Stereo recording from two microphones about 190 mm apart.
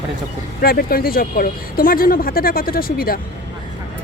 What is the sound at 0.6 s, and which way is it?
Speech, 50° left (ahead or behind).